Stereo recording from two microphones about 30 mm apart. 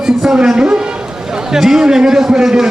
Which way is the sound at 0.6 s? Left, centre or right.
Right.